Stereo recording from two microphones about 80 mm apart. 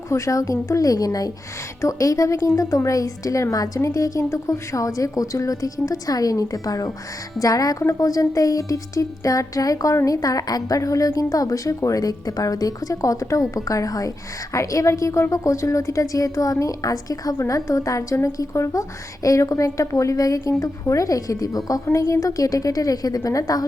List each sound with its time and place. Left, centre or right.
0.1 s speech: left